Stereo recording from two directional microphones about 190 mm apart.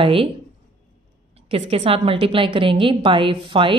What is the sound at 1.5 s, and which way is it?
Speech, 30° right (ahead or behind).